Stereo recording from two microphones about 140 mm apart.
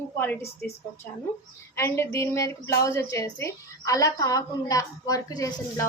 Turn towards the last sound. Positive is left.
turn(degrees=25)  # may be behind; listen again after turning